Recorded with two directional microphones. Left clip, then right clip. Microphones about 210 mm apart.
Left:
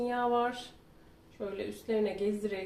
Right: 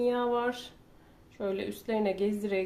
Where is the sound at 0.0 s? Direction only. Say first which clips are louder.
Right 2 dB; 55° right (ahead or behind).